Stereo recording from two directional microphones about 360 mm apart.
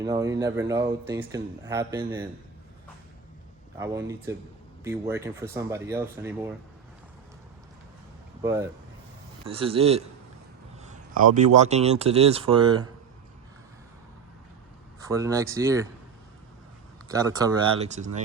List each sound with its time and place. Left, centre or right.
0.0 s speech: centre
3.8 s speech: centre
8.4 s speech: centre
15.0 s speech: centre
17.1 s speech: centre